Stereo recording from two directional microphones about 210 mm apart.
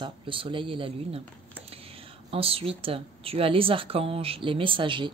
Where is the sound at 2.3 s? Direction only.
25° right (ahead or behind).